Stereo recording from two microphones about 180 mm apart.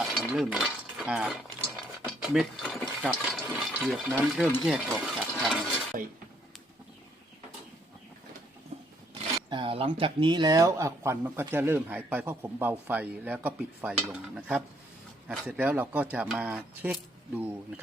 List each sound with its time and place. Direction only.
0.3 s speech: centre (ahead or behind)
2.0 s mechanisms: centre (ahead or behind)
3.0 s speech: 5° right (ahead or behind)
8.7 s a sound: 35° right (ahead or behind)
9.1 s speech: 30° right (ahead or behind); by 17.7 s 5° right (ahead or behind)